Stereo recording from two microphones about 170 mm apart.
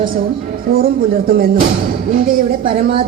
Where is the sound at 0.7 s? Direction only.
60° right (ahead or behind).